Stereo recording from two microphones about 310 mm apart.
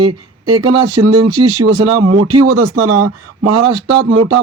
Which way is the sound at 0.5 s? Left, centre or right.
Right.